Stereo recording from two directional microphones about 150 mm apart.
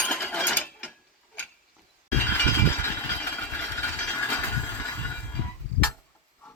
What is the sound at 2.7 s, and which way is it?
Vehicle, 15° left (ahead or behind).